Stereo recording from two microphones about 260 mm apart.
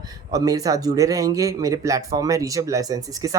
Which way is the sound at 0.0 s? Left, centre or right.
Centre.